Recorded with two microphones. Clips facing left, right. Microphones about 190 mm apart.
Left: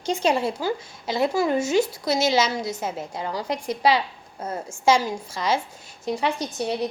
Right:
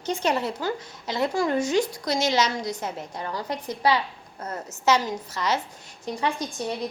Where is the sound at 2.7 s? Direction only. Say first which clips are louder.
Left 3 dB; 25° left (ahead or behind).